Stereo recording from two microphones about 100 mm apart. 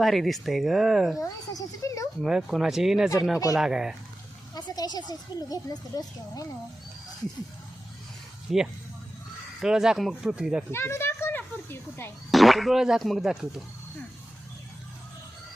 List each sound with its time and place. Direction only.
0.0 s speech: centre (ahead or behind)
1.2 s a child's voice: 35° left (ahead or behind)
2.2 s speech: 5° right (ahead or behind)
4.5 s speech: 40° left (ahead or behind)
8.5 s speech: 5° right (ahead or behind)
10.7 s a sound: 25° left (ahead or behind)
12.3 s speech: centre (ahead or behind)